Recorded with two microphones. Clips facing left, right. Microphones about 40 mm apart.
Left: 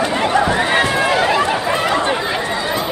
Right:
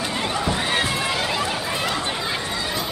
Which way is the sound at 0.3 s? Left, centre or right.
Left.